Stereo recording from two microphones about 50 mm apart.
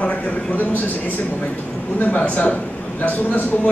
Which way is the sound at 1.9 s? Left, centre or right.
Left.